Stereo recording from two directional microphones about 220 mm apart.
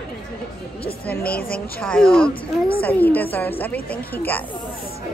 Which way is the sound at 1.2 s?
45° left (ahead or behind).